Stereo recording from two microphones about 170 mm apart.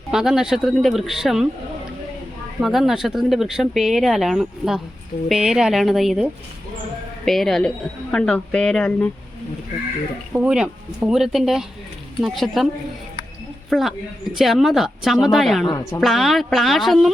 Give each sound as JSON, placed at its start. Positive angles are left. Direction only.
{"t": 0.1, "sound": "speech", "side_deg": -5}
{"t": 2.6, "sound": "speech", "side_deg": 0}
{"t": 10.3, "sound": "speech", "side_deg": -5}
{"t": 13.7, "sound": "speech", "side_deg": 0}
{"t": 15.6, "sound": "a woman's voice", "side_deg": 20}
{"t": 16.0, "sound": "speech", "side_deg": 0}